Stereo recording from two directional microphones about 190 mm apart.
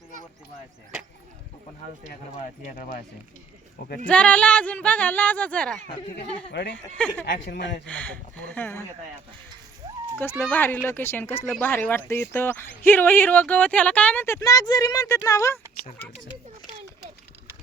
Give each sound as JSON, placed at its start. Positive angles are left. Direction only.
{"t": 2.6, "sound": "speech", "side_deg": 45}
{"t": 4.0, "sound": "speech", "side_deg": 5}
{"t": 5.9, "sound": "speech", "side_deg": 25}
{"t": 6.5, "sound": "speech", "side_deg": 65}
{"t": 7.9, "sound": "speech", "side_deg": 10}
{"t": 9.8, "sound": "honk", "side_deg": -20}
{"t": 10.2, "sound": "speech", "side_deg": 10}